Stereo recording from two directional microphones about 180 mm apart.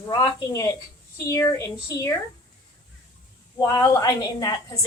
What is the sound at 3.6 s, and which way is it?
Speech, 20° left (ahead or behind).